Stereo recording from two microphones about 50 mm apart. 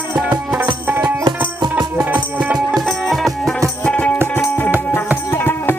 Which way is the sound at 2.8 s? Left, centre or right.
Centre.